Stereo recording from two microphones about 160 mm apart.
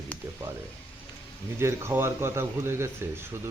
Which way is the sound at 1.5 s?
15° right (ahead or behind).